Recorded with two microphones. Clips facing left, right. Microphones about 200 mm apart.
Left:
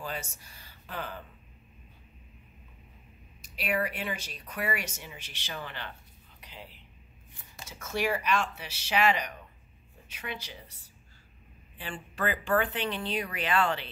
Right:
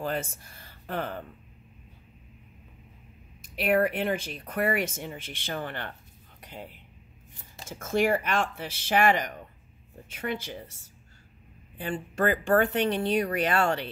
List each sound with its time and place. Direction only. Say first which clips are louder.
0.0 s speech: right 7 dB; 55° right (ahead or behind)
3.4 s speech: right 7 dB; 55° right (ahead or behind)
11.8 s speech: right 6 dB; 45° right (ahead or behind)